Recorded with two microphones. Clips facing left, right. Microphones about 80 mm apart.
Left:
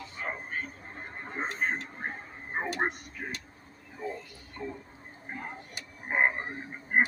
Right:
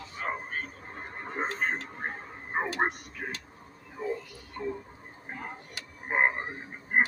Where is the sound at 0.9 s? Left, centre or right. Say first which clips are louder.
Right 3 dB; right.